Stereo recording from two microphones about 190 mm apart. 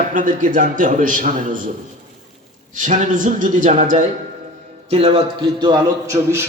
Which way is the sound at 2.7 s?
40° right (ahead or behind).